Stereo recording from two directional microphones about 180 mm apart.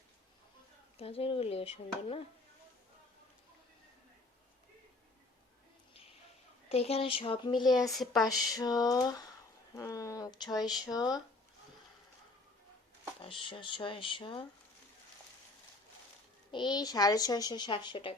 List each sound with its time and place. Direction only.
0.9 s speech: 35° left (ahead or behind)
5.9 s a sound: 30° left (ahead or behind)
6.7 s speech: 35° left (ahead or behind)
9.7 s a sound: 15° left (ahead or behind)
10.6 s speech: centre (ahead or behind)
10.9 s speech: 20° left (ahead or behind)
13.4 s speech: 25° left (ahead or behind)
16.5 s speech: 25° left (ahead or behind)